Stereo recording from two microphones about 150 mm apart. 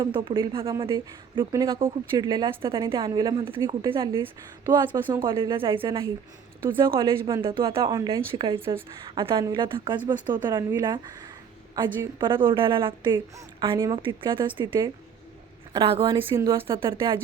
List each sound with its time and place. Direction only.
0.0 s a woman's voice: 35° right (ahead or behind)
0.9 s a woman's voice: 25° right (ahead or behind)
4.1 s speech: 20° right (ahead or behind)
5.5 s a woman's voice: 35° right (ahead or behind)
16.3 s speech: 20° right (ahead or behind)
16.6 s a woman's voice: 35° right (ahead or behind)